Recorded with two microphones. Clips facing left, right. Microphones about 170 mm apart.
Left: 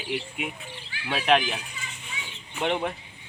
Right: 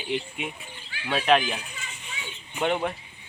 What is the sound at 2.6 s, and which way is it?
Speech, 15° left (ahead or behind).